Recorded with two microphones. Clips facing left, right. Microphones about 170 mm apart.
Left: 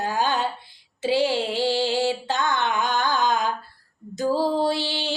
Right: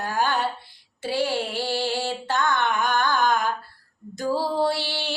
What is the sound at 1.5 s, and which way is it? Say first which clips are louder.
Music: left 4 dB; 15° left (ahead or behind).